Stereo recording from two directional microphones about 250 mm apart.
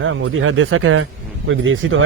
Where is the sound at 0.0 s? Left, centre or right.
Right.